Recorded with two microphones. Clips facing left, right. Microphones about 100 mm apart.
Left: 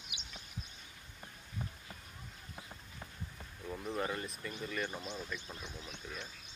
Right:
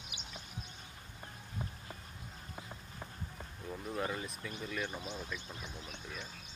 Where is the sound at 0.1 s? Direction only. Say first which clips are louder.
Right 1 dB; 40° right (ahead or behind).